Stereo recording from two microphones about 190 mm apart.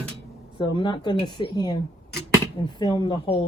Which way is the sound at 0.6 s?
25° left (ahead or behind).